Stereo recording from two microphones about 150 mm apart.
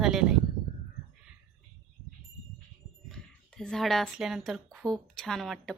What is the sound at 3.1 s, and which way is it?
Speech, 5° left (ahead or behind).